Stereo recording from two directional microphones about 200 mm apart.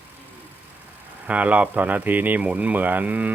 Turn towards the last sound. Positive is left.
turn(degrees=-10)  # may be behind; listen again after turning